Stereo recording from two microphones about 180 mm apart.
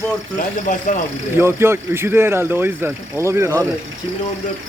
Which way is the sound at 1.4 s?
15° right (ahead or behind).